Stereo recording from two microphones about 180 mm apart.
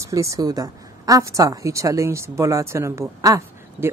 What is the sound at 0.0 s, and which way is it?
A woman's voice, 15° right (ahead or behind).